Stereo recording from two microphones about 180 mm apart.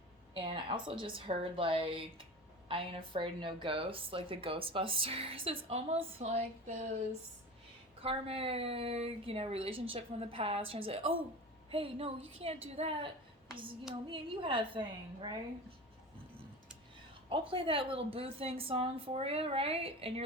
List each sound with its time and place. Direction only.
0.3 s a woman's voice: 25° right (ahead or behind)
8.0 s a woman's voice: 30° right (ahead or behind)
14.1 s a woman's voice: 30° right (ahead or behind)
17.2 s a woman's voice: 30° right (ahead or behind)